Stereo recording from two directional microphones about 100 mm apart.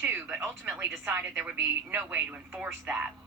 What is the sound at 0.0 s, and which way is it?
A woman's voice, 20° right (ahead or behind).